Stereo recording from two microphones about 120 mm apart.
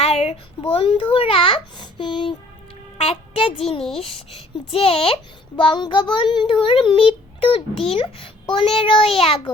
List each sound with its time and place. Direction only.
0.0 s a child's voice: 60° left (ahead or behind); by 2.3 s 40° left (ahead or behind)
3.0 s speech: 55° left (ahead or behind)
5.6 s child singing: 40° left (ahead or behind)
7.4 s a child's voice: 55° left (ahead or behind)